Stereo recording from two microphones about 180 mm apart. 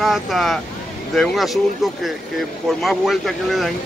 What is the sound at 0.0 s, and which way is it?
Speech, centre (ahead or behind).